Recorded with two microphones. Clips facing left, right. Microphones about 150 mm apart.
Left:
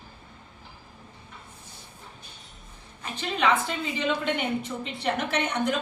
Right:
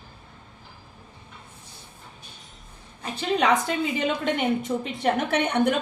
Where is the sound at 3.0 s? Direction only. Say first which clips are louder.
Right 3 dB; 35° right (ahead or behind).